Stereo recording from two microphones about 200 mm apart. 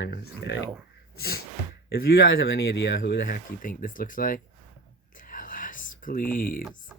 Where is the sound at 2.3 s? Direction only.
70° left (ahead or behind).